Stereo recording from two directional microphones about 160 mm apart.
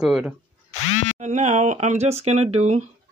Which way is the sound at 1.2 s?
50° right (ahead or behind).